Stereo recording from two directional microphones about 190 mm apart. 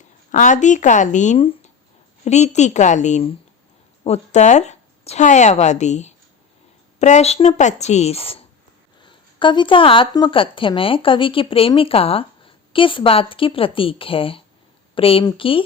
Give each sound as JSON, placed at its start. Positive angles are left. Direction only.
{"t": 0.3, "sound": "a woman's voice", "side_deg": 40}